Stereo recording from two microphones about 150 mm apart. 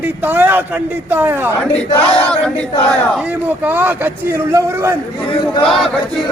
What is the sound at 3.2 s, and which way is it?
A man's voice, 10° right (ahead or behind).